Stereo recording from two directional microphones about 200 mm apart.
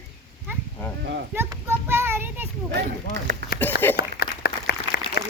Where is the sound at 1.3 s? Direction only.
10° right (ahead or behind).